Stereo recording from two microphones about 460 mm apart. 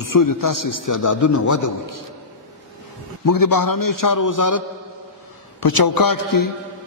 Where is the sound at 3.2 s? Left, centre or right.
Left.